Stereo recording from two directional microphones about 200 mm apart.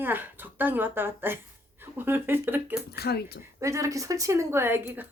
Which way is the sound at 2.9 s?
55° left (ahead or behind).